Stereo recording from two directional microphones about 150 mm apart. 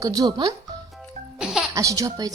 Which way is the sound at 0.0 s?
25° right (ahead or behind).